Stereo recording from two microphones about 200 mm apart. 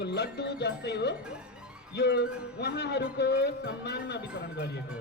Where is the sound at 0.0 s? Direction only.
55° left (ahead or behind).